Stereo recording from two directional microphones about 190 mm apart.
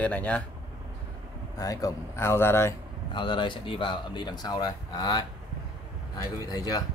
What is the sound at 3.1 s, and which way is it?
Speech, 25° left (ahead or behind).